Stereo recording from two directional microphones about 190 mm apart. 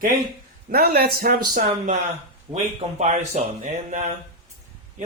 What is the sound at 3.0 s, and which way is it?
Speech, 40° right (ahead or behind).